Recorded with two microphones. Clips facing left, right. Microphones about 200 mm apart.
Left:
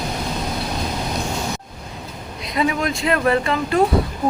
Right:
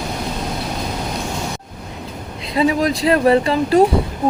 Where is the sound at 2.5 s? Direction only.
30° right (ahead or behind).